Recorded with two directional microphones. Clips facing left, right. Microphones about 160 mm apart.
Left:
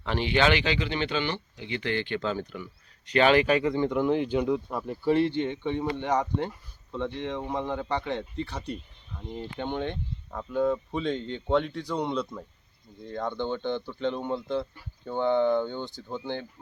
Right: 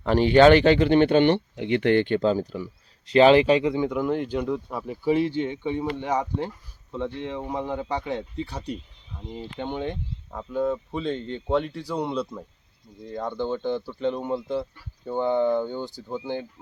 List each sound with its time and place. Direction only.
0.0 s speech: 45° right (ahead or behind); by 3.8 s 15° right (ahead or behind)
3.8 s speech: centre (ahead or behind)
9.1 s speech: centre (ahead or behind)